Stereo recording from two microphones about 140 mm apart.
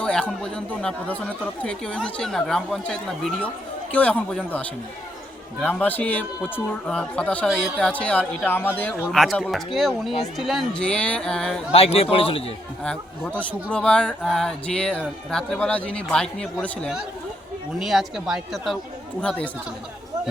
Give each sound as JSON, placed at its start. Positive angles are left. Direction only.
{"t": 0.0, "sound": "speech", "side_deg": 5}
{"t": 9.1, "sound": "speech", "side_deg": 0}
{"t": 11.7, "sound": "speech", "side_deg": 45}
{"t": 12.8, "sound": "speech", "side_deg": 5}